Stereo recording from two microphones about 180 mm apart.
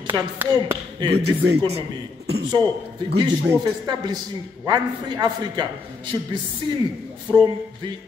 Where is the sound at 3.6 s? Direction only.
25° right (ahead or behind).